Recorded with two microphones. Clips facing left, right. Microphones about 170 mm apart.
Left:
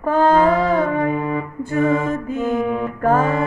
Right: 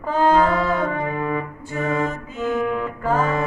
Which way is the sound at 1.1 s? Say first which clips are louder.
Left 3 dB; 10° left (ahead or behind).